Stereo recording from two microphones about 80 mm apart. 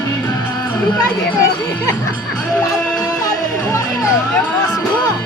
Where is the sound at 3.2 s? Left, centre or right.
Left.